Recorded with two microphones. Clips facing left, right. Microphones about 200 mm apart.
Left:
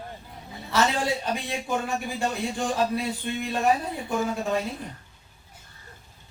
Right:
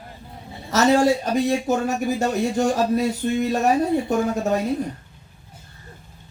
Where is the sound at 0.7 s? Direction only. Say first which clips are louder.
Right 8 dB; 45° right (ahead or behind).